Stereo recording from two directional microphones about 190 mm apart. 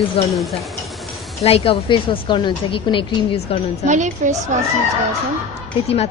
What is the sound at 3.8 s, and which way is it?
Speech, 40° right (ahead or behind).